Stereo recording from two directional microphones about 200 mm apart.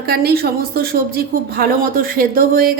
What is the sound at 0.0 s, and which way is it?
A woman's voice, 50° right (ahead or behind).